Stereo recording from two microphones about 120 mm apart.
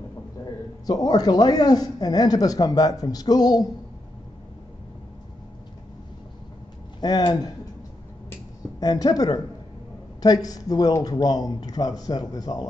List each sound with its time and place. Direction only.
0.8 s speech: 35° left (ahead or behind)
7.0 s speech: 35° left (ahead or behind)
8.7 s speech: 30° left (ahead or behind)